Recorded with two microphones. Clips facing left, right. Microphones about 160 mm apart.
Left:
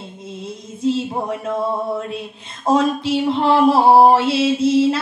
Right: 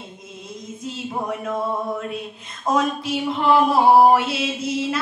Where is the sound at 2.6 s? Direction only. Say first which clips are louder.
Left 5 dB; 30° left (ahead or behind).